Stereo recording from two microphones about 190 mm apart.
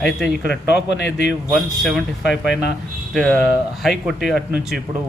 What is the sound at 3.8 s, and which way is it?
Speech, centre (ahead or behind).